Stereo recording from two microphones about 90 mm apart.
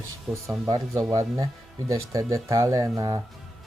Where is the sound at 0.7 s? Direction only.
40° right (ahead or behind).